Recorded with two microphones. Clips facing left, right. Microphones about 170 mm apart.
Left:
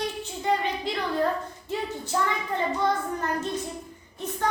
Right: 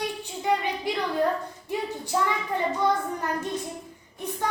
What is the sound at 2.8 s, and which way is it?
Speech, 10° right (ahead or behind).